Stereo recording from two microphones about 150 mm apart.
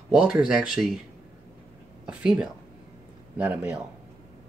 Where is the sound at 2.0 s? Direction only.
5° right (ahead or behind).